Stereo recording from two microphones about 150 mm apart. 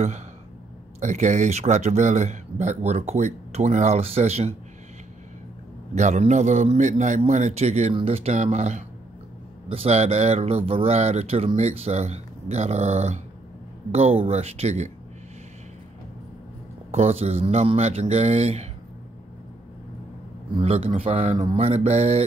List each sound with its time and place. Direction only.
1.0 s speech: 55° right (ahead or behind)
5.9 s speech: 50° right (ahead or behind)
16.9 s speech: 45° right (ahead or behind)
20.5 s speech: 40° right (ahead or behind)